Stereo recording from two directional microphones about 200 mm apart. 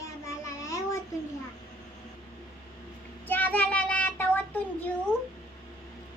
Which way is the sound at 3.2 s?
10° left (ahead or behind).